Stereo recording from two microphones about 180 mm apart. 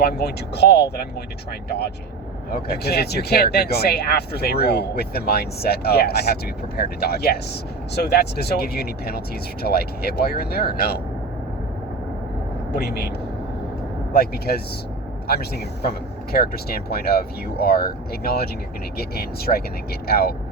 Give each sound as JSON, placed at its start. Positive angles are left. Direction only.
{"t": 0.0, "sound": "speech", "side_deg": 60}
{"t": 2.5, "sound": "speech", "side_deg": 60}
{"t": 12.7, "sound": "speech", "side_deg": 60}